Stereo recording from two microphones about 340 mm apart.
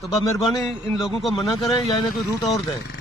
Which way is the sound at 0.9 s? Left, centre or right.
Centre.